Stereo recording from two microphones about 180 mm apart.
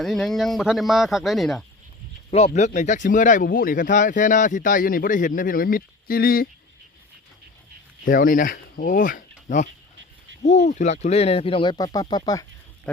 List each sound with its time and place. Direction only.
0.0 s speech: centre (ahead or behind)
2.6 s speech: 40° left (ahead or behind)
8.0 s speech: 50° left (ahead or behind); by 12.5 s 20° left (ahead or behind)